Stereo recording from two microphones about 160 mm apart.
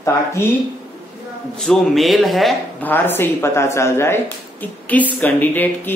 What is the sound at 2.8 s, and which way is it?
Speech, 15° left (ahead or behind).